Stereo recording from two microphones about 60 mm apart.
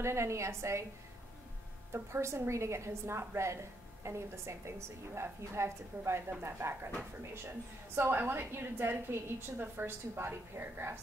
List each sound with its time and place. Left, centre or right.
0.0 s a woman's voice: right
2.0 s a woman's voice: right